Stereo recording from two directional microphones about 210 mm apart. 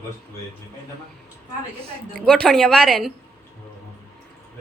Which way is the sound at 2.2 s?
5° left (ahead or behind).